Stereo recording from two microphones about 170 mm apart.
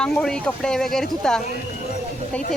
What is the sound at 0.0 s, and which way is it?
Speech, 5° left (ahead or behind).